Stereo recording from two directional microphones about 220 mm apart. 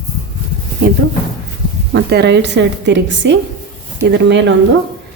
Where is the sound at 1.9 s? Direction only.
50° right (ahead or behind).